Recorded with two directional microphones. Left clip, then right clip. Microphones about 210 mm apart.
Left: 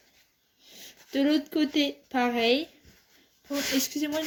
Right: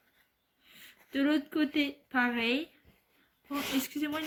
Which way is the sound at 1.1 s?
15° right (ahead or behind).